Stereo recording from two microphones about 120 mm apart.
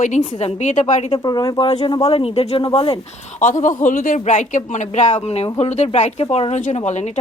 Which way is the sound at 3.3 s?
90° left.